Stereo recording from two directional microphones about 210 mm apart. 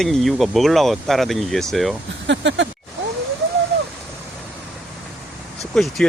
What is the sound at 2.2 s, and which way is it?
Speech, 60° right (ahead or behind).